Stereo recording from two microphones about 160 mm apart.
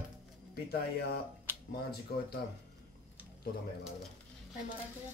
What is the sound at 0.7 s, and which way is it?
Speech, 85° left.